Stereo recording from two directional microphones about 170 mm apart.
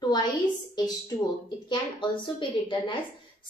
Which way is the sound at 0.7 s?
25° left (ahead or behind).